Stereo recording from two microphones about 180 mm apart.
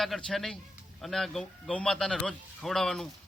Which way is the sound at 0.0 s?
Centre (ahead or behind).